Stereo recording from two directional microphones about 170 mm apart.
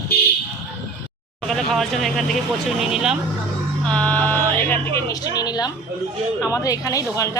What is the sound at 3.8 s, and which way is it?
Speech, 5° left (ahead or behind).